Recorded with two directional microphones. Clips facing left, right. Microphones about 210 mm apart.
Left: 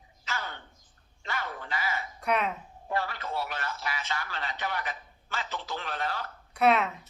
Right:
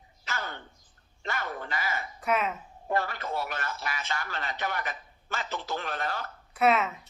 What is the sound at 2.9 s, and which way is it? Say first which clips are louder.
A man's voice: right 2 dB; 45° right (ahead or behind).